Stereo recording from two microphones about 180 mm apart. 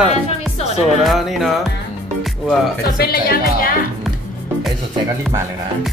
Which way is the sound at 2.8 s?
55° left (ahead or behind).